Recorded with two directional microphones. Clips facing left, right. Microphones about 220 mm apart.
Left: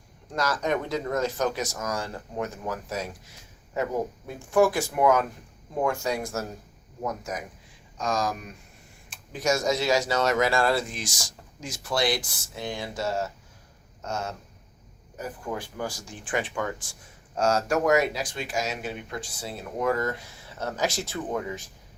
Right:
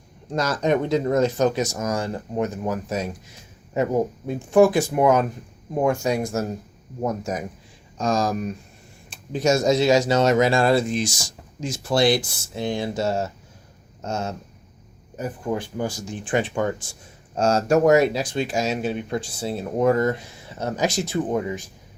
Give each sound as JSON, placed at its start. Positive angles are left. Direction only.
{"t": 0.3, "sound": "speech", "side_deg": -20}
{"t": 4.3, "sound": "speech", "side_deg": -20}
{"t": 7.0, "sound": "speech", "side_deg": -30}